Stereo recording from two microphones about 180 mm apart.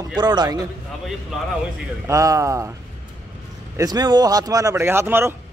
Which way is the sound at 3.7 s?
20° right (ahead or behind).